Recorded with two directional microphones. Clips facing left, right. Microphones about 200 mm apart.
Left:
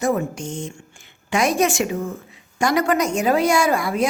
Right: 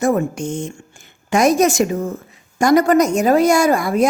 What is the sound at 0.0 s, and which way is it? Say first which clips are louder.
A woman's voice: right 4 dB; 50° right (ahead or behind).